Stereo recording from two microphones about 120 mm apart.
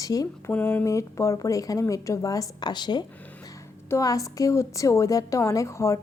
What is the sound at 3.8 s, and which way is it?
A woman's voice, 25° left (ahead or behind).